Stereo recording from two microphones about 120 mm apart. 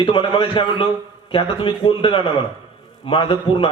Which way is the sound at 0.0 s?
45° left (ahead or behind).